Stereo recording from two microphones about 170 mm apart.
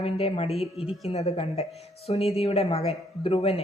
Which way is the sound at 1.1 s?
40° left (ahead or behind).